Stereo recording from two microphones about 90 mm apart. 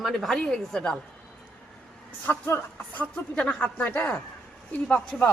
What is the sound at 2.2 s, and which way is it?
Speech, 20° left (ahead or behind).